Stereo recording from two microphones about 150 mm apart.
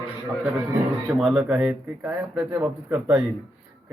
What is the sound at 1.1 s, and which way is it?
A man's voice, 5° right (ahead or behind).